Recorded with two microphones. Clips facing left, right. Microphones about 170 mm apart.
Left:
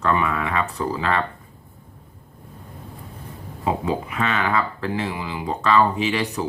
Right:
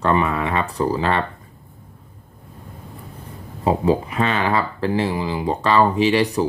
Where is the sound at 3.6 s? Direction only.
35° right (ahead or behind).